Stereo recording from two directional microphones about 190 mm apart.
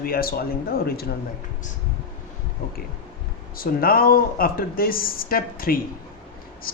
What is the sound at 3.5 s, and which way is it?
Speech, 50° left (ahead or behind).